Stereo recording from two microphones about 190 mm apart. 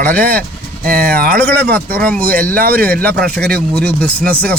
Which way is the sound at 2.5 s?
50° right (ahead or behind).